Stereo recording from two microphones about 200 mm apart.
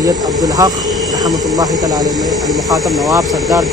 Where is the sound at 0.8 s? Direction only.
Centre (ahead or behind).